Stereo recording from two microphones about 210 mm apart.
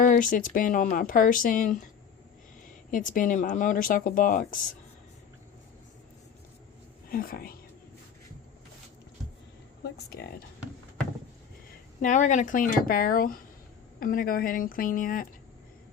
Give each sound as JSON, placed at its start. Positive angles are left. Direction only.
{"t": 0.0, "sound": "speech", "side_deg": 40}
{"t": 2.9, "sound": "speech", "side_deg": 40}
{"t": 7.1, "sound": "speech", "side_deg": 45}
{"t": 11.9, "sound": "speech", "side_deg": 35}